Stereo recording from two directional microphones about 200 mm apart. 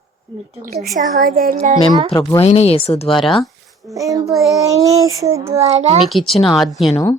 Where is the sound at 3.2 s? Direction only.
Centre (ahead or behind).